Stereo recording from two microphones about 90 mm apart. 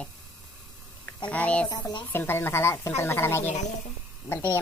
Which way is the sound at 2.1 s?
25° left (ahead or behind).